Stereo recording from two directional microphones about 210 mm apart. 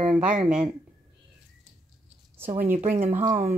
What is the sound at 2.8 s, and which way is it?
Speech, 35° right (ahead or behind).